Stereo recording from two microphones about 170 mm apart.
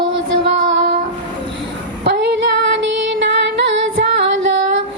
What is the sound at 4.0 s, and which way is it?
Female singing, 90° right.